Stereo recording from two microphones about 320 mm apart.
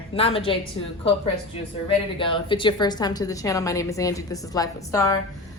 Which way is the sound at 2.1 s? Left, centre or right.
Centre.